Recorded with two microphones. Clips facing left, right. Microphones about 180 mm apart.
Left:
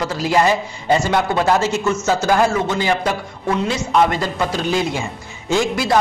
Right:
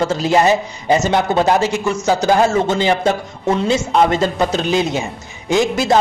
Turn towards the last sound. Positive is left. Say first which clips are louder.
# right 3 dB
turn(degrees=-20)  # may be behind; listen again after turning